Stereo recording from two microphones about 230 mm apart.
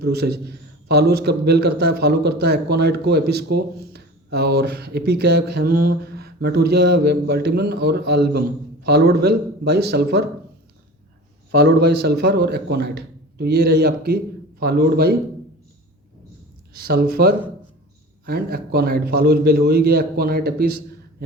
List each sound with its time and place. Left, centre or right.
0.0 s a man's voice: right
11.5 s a man's voice: right
16.7 s a man's voice: right